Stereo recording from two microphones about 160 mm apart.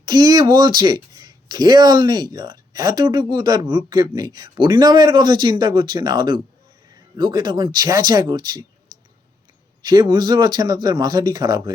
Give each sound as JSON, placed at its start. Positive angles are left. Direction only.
{"t": 0.0, "sound": "speech", "side_deg": -25}
{"t": 9.8, "sound": "speech", "side_deg": -25}